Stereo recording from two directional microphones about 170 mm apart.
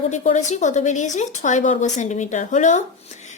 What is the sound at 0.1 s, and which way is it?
A woman's voice, 45° left (ahead or behind).